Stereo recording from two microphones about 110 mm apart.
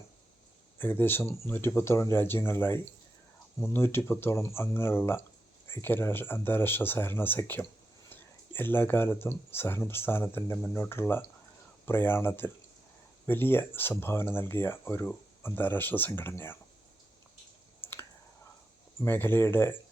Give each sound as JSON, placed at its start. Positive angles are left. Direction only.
{"t": 0.8, "sound": "speech", "side_deg": 20}
{"t": 17.7, "sound": "clicking", "side_deg": 20}
{"t": 19.0, "sound": "speech", "side_deg": 20}